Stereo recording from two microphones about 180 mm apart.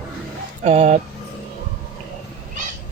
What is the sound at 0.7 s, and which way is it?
Speech, 40° right (ahead or behind).